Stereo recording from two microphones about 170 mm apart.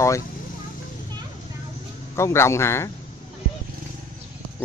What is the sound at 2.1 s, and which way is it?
Speech, 15° left (ahead or behind).